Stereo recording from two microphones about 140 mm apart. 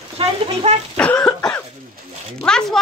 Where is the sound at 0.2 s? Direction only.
45° right (ahead or behind).